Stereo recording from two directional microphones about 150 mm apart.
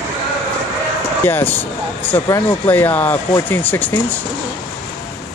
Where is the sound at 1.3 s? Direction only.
15° left (ahead or behind).